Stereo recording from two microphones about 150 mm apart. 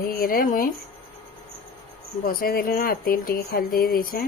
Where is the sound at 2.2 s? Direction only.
80° left.